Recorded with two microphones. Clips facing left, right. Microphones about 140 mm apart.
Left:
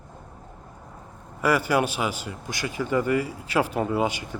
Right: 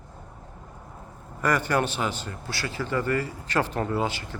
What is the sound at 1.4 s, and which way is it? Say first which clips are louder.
Speech: left 2 dB; 10° left (ahead or behind).